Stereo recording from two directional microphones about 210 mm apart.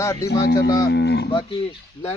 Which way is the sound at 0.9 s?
55° left (ahead or behind).